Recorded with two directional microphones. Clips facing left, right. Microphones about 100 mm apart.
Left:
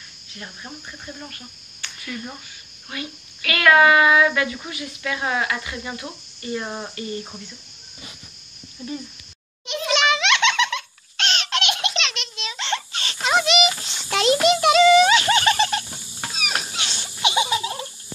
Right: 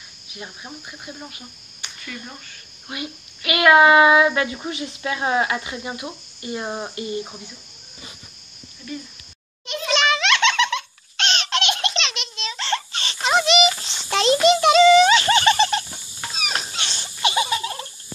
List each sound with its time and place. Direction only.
0.3 s speech: 15° right (ahead or behind)
2.9 s a child's voice: 20° right (ahead or behind)
9.7 s baby laughter: 15° left (ahead or behind)
12.4 s a sound: 10° left (ahead or behind)